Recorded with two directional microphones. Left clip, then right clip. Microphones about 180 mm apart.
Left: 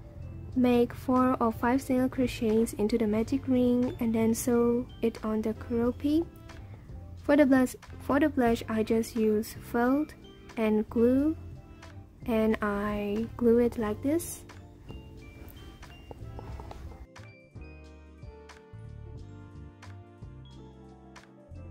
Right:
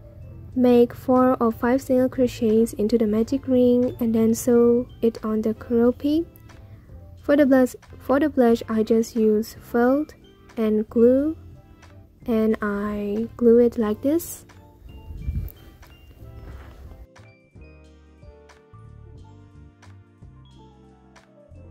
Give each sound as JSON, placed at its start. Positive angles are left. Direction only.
{"t": 0.6, "sound": "a woman's voice", "side_deg": -15}
{"t": 7.2, "sound": "a woman's voice", "side_deg": -15}
{"t": 12.3, "sound": "a woman's voice", "side_deg": -15}
{"t": 13.1, "sound": "speech", "side_deg": 0}
{"t": 13.5, "sound": "a woman's voice", "side_deg": -15}
{"t": 13.8, "sound": "speech", "side_deg": -25}